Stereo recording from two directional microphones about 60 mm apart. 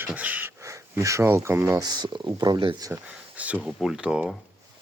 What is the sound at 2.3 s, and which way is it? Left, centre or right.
Speech, right.